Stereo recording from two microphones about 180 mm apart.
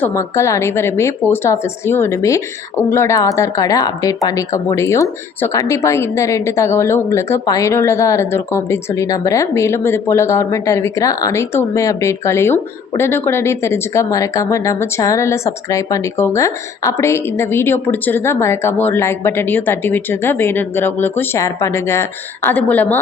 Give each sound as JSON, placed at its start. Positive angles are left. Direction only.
{"t": 0.0, "sound": "a woman's voice", "side_deg": 15}